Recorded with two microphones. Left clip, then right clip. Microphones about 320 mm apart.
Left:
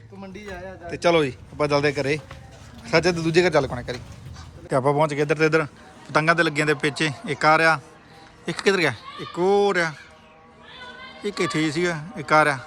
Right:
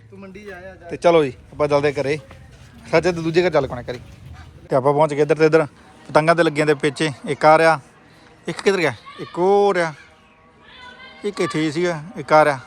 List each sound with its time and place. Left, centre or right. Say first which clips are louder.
0.2 s speech: even; left
0.9 s a man's voice: right 4 dB; centre
11.2 s a man's voice: right 2 dB; centre